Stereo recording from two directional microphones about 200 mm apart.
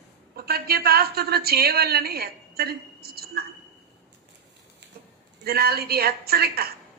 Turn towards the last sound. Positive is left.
turn(degrees=-50)  # may be behind; listen again after turning